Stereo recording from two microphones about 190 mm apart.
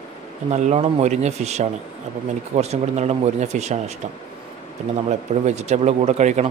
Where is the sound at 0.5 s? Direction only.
35° right (ahead or behind).